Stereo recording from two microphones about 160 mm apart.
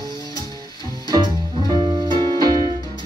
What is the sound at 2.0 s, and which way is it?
Music, 25° right (ahead or behind).